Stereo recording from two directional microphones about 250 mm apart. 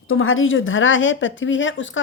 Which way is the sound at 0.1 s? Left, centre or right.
Left.